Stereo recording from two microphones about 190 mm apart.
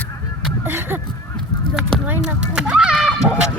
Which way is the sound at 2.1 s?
5° right (ahead or behind).